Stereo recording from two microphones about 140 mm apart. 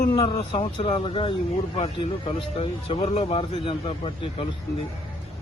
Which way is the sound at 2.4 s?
40° left (ahead or behind).